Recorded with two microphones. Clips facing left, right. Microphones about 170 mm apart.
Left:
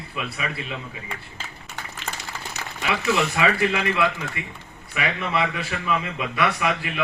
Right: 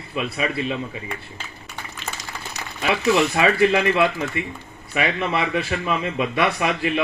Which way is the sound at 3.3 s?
30° right (ahead or behind).